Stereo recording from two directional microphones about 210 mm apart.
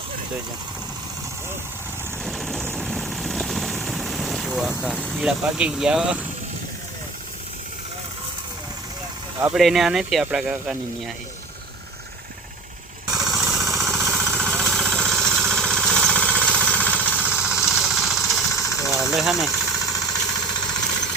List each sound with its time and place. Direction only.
2.2 s vehicle: centre (ahead or behind)
9.4 s speech: 5° right (ahead or behind)
13.1 s a sound: 15° right (ahead or behind)
13.4 s vehicle: centre (ahead or behind)
14.5 s engine: centre (ahead or behind)
15.7 s jackhammer: centre (ahead or behind)
16.9 s engine: 5° left (ahead or behind)
17.2 s vehicle: 5° right (ahead or behind)
18.5 s engine: 15° left (ahead or behind)
18.9 s engine: centre (ahead or behind)
19.5 s engine: 15° left (ahead or behind)